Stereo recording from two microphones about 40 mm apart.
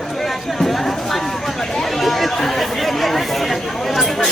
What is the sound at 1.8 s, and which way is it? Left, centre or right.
Chatter, centre.